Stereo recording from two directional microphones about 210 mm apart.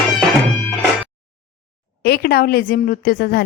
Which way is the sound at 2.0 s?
50° left (ahead or behind).